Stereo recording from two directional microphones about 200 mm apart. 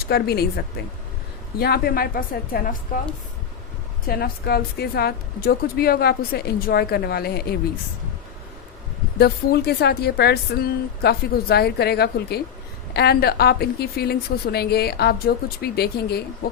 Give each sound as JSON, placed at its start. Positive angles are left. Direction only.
{"t": 0.0, "sound": "a woman's voice", "side_deg": 50}
{"t": 4.1, "sound": "a woman's voice", "side_deg": 50}
{"t": 9.1, "sound": "a woman's voice", "side_deg": 50}